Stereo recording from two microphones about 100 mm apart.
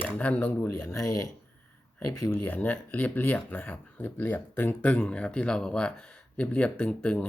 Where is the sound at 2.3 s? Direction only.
15° left (ahead or behind).